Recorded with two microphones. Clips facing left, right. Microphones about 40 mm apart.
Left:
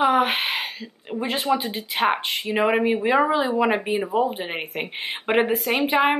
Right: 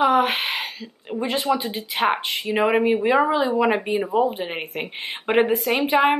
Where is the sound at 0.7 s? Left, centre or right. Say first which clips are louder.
Right 1 dB; centre.